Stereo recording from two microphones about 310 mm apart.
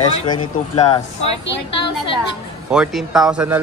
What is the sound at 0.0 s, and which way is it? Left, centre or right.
Speech, centre.